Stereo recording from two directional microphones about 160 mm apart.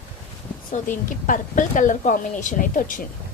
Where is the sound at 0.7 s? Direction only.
55° left (ahead or behind).